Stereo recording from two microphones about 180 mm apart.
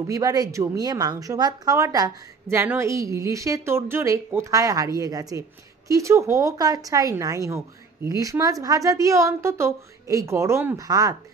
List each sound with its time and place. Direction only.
0.0 s a woman's voice: 20° right (ahead or behind)